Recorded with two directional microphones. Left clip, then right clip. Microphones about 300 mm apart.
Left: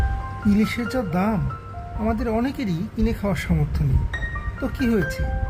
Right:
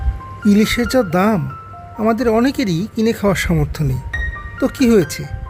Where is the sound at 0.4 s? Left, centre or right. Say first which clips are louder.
Right 8 dB; right.